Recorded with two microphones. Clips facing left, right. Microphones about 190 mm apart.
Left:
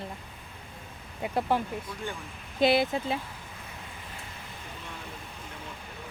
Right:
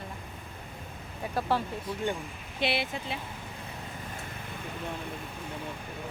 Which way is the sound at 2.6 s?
40° left (ahead or behind).